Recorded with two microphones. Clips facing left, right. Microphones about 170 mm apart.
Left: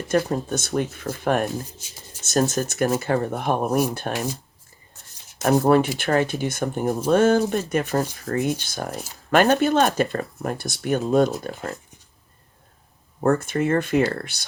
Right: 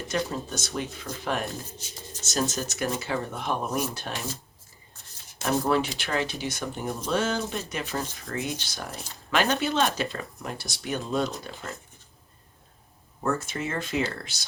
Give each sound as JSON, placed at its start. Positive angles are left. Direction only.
{"t": 0.1, "sound": "speech", "side_deg": 55}
{"t": 5.4, "sound": "speech", "side_deg": 50}
{"t": 13.2, "sound": "speech", "side_deg": 55}